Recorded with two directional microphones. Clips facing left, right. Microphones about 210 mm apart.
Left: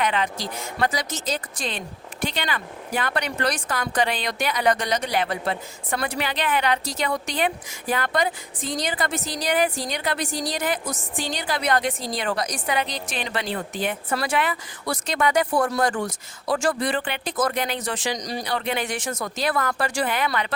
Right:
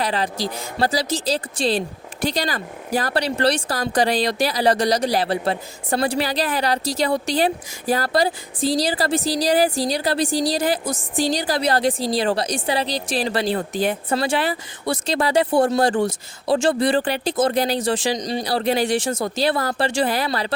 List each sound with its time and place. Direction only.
0.0 s speech: 35° right (ahead or behind)